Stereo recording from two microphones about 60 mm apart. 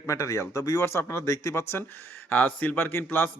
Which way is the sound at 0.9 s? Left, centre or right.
Left.